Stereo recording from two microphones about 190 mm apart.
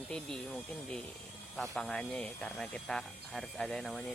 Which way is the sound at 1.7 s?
5° left (ahead or behind).